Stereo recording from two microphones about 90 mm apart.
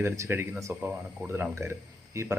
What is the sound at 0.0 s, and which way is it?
Speech, 25° right (ahead or behind).